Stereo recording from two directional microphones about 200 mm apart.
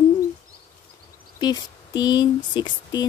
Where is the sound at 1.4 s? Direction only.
20° left (ahead or behind).